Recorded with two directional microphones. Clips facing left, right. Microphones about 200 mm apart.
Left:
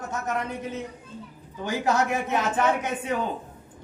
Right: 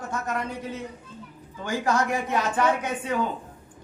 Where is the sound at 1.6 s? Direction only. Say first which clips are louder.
Left 1 dB; 20° left (ahead or behind).